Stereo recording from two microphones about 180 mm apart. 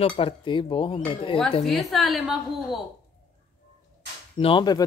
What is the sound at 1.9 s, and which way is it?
Speech, centre (ahead or behind).